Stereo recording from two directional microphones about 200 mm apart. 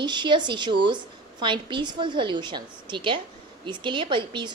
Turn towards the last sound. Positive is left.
turn(degrees=-25)  # may be behind; listen again after turning